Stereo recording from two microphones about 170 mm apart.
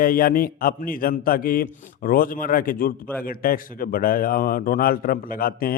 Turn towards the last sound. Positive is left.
turn(degrees=60)  # may be behind; listen again after turning